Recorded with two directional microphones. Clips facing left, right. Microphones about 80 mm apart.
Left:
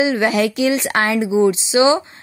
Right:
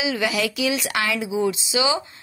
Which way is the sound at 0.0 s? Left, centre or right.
Left.